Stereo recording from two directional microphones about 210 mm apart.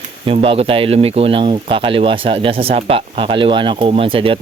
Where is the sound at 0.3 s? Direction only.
25° right (ahead or behind).